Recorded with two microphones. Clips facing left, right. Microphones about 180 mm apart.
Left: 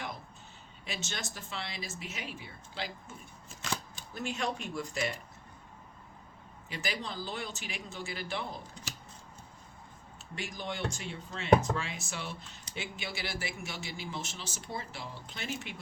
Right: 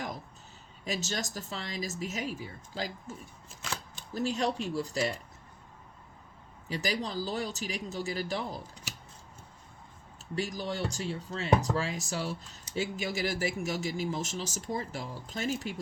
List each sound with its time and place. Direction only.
0.9 s speech: 40° right (ahead or behind)
6.7 s speech: 40° right (ahead or behind)
10.3 s speech: 40° right (ahead or behind)